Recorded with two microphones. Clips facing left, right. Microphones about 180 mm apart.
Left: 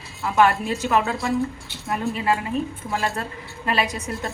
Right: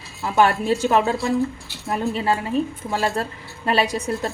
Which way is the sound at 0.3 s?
30° right (ahead or behind).